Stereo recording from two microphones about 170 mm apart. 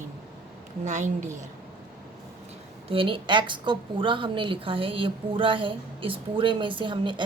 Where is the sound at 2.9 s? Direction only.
30° right (ahead or behind).